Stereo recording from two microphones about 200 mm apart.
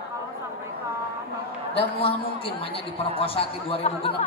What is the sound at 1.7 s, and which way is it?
Speech, 30° left (ahead or behind).